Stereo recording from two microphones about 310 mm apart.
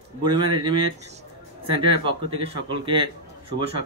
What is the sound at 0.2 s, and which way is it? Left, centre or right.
A man's voice, centre.